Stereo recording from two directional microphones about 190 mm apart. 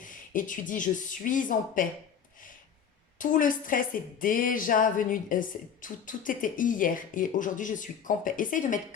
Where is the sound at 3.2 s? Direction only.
45° left (ahead or behind).